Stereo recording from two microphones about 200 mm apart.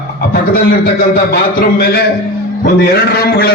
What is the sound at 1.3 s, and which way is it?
Speech, 50° left (ahead or behind).